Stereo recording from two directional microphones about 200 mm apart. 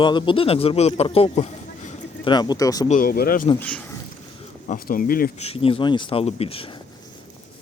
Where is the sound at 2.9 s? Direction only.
45° left (ahead or behind).